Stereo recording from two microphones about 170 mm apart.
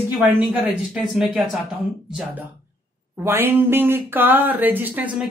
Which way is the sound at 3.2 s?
15° right (ahead or behind).